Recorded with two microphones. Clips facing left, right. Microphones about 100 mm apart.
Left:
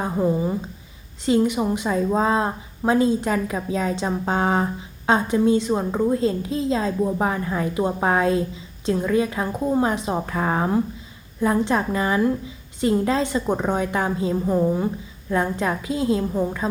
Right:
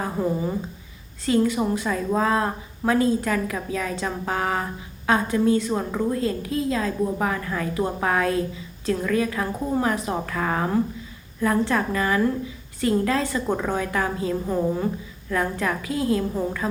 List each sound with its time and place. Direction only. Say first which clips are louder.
0.0 s a woman's voice: left 3 dB; 15° left (ahead or behind)
14.4 s a woman's voice: left 4 dB; 10° left (ahead or behind)